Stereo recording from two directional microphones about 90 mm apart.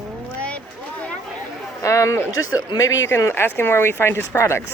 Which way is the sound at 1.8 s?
35° left (ahead or behind).